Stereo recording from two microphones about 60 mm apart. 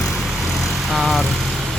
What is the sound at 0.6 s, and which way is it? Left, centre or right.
Vehicle, centre.